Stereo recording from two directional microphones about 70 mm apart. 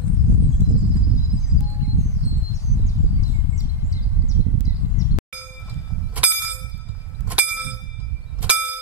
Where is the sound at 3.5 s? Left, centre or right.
Left.